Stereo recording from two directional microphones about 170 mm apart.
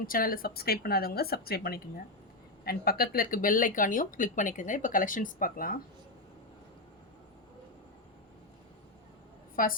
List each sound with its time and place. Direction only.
0.0 s a woman's voice: 55° left (ahead or behind)
9.6 s a woman's voice: 55° left (ahead or behind)